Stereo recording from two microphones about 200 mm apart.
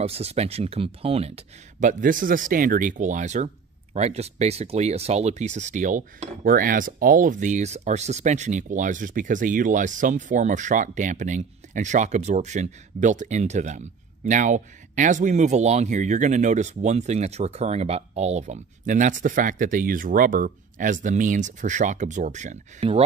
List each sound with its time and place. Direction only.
0.0 s speech: 30° right (ahead or behind)